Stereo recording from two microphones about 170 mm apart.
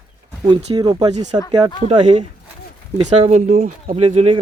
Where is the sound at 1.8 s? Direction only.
35° right (ahead or behind).